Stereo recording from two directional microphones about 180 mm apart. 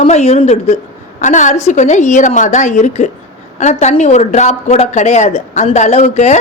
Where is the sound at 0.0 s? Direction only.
35° left (ahead or behind).